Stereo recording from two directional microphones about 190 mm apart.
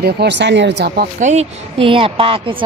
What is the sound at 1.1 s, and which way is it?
Speech, 35° right (ahead or behind).